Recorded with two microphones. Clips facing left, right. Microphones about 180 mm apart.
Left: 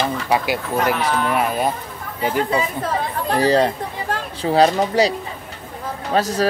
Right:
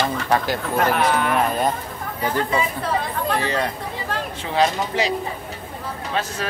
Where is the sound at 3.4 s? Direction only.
35° left (ahead or behind).